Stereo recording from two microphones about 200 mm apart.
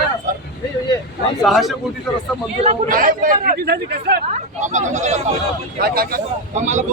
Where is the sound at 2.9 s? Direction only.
45° right (ahead or behind).